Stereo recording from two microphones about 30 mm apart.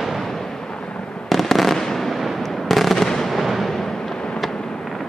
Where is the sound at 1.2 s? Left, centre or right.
Centre.